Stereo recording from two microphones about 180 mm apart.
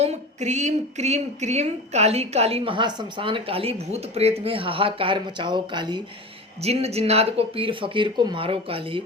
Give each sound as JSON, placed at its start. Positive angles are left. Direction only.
{"t": 0.0, "sound": "speech", "side_deg": -40}
{"t": 6.6, "sound": "speech", "side_deg": -35}